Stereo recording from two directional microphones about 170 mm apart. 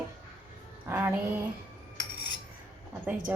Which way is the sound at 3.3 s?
10° right (ahead or behind).